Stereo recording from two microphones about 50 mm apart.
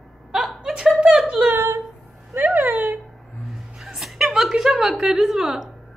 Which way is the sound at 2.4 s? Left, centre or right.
Right.